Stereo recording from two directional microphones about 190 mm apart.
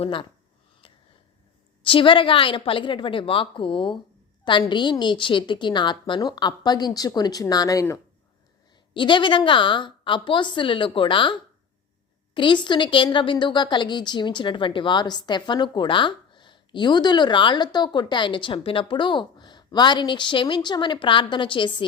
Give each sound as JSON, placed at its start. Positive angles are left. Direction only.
{"t": 0.0, "sound": "a woman's voice", "side_deg": 25}
{"t": 0.8, "sound": "a sound", "side_deg": 30}
{"t": 1.8, "sound": "a woman's voice", "side_deg": 25}